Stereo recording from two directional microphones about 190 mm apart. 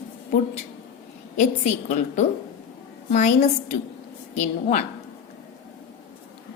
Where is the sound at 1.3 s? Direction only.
40° left (ahead or behind).